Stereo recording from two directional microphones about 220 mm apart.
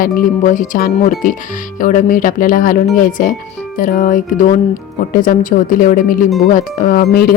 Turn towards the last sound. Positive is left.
turn(degrees=45)  # may be behind; listen again after turning